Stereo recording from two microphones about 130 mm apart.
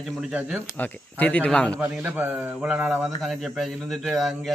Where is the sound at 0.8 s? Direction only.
10° left (ahead or behind).